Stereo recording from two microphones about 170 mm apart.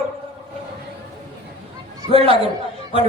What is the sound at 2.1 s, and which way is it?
Speech, 35° right (ahead or behind).